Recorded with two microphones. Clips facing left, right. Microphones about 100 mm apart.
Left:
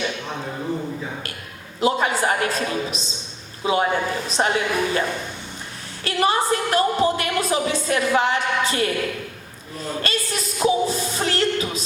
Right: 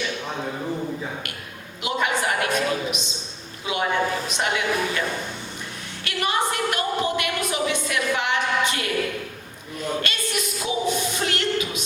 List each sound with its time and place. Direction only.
1.8 s a man's voice: 35° left (ahead or behind)
6.1 s a woman's voice: 35° left (ahead or behind)
9.7 s a sound: 35° left (ahead or behind)